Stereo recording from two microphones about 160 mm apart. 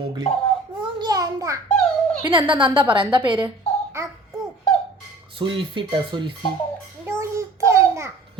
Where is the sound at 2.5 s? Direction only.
30° right (ahead or behind).